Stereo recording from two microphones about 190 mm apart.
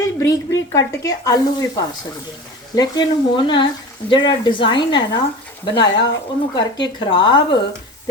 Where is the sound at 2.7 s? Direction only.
20° left (ahead or behind).